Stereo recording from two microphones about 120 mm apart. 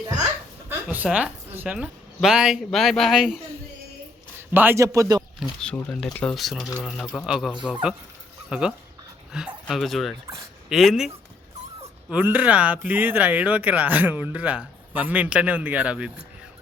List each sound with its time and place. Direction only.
0.7 s a man's voice: 15° right (ahead or behind)
4.4 s a sound: 20° right (ahead or behind)
4.8 s speech: 25° right (ahead or behind)
5.4 s a man's voice: 5° left (ahead or behind)
12.1 s speech: 15° right (ahead or behind)